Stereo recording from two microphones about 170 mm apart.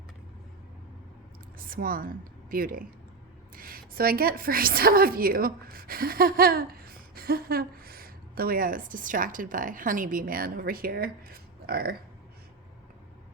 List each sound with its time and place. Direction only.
1.5 s a woman's voice: 55° right (ahead or behind)